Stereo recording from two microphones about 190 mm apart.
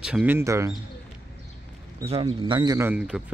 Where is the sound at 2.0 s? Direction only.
30° right (ahead or behind); by 3.3 s 5° right (ahead or behind).